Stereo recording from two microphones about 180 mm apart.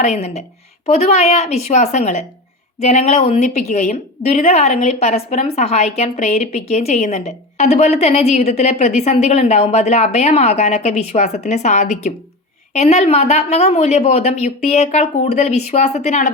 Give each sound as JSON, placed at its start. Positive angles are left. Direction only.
{"t": 0.0, "sound": "a woman's voice", "side_deg": 35}